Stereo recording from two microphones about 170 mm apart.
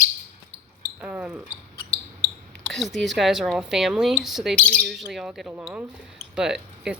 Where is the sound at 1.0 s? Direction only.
10° right (ahead or behind).